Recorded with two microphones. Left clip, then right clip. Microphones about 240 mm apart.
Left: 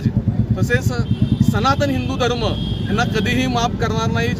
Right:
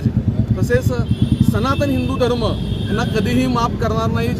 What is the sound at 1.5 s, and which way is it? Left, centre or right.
Speech, centre.